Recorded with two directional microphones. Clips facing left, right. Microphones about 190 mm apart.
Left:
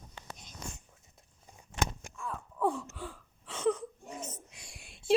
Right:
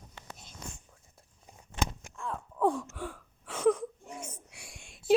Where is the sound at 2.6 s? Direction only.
15° right (ahead or behind).